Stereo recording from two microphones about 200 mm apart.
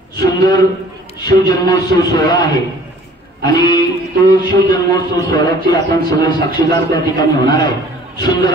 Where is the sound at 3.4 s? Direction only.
20° left (ahead or behind).